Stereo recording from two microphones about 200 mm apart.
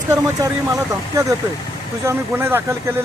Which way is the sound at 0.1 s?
15° right (ahead or behind).